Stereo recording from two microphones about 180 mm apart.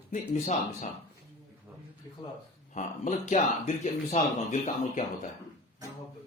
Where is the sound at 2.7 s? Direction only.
40° left (ahead or behind).